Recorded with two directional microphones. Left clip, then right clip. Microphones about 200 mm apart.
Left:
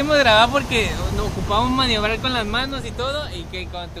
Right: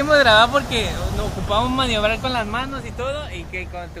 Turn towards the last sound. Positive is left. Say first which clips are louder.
# left 1 dB
turn(degrees=30)  # may be behind; listen again after turning